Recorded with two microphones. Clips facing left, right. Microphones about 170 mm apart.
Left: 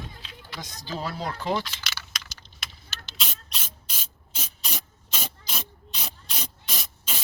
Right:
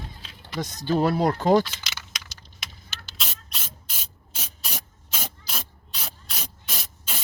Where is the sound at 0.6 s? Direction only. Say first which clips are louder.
Right 11 dB; 55° right (ahead or behind).